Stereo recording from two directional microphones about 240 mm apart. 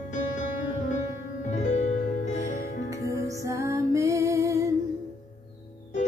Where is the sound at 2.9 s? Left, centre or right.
Centre.